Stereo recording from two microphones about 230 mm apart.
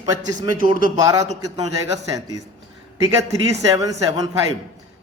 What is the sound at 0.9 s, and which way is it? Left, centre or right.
Speech, centre.